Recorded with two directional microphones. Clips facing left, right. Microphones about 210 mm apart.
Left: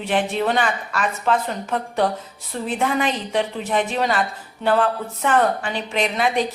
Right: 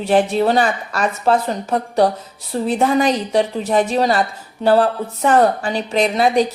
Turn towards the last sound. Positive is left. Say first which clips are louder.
# right 6 dB
turn(degrees=-35)  # may be behind; listen again after turning